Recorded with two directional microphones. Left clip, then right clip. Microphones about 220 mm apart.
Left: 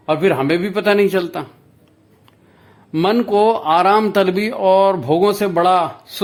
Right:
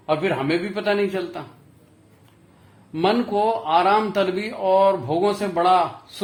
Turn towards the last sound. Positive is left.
turn(degrees=50)  # may be behind; listen again after turning